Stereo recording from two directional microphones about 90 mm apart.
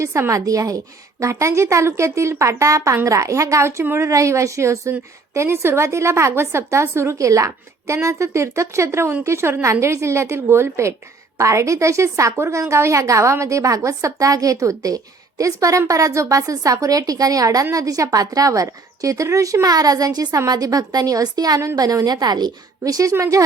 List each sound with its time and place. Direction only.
0.0 s a woman's voice: 35° right (ahead or behind)